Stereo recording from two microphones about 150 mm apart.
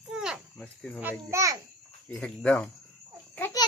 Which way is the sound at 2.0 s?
5° left (ahead or behind).